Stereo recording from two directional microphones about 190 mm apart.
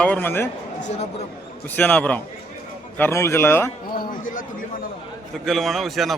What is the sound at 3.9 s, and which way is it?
Speech, 45° left (ahead or behind).